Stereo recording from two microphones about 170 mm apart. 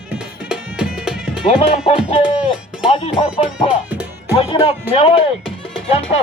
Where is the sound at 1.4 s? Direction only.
35° left (ahead or behind).